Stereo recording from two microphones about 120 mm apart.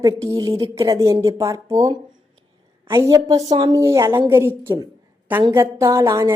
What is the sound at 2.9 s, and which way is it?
A woman's voice, 25° right (ahead or behind).